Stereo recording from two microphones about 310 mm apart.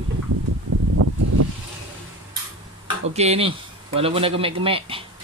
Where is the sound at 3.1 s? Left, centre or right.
Centre.